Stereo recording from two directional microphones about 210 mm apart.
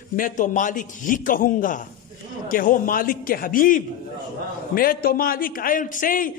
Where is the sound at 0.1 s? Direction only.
40° left (ahead or behind).